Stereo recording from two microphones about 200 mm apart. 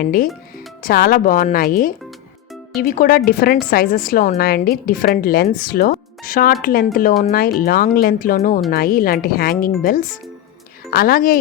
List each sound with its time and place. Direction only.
0.0 s a woman's voice: 45° left (ahead or behind)